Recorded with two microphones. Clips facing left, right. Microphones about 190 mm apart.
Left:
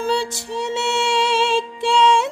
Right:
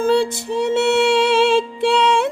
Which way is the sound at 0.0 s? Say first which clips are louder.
Right 6 dB; 55° right (ahead or behind).